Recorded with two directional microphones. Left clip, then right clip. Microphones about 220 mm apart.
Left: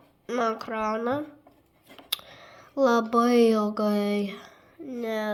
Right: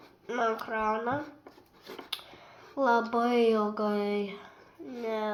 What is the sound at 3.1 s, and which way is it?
Speech, 50° left (ahead or behind).